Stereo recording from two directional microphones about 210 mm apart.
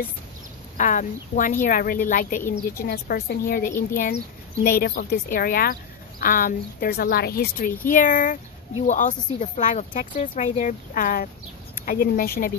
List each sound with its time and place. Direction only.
0.7 s speech: 35° left (ahead or behind)